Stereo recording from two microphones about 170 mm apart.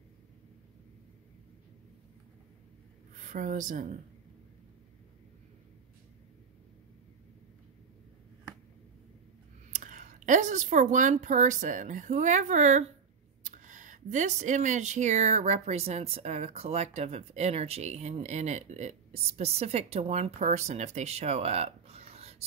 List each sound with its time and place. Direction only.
3.2 s a woman's voice: 50° right (ahead or behind)
9.7 s speech: 50° right (ahead or behind)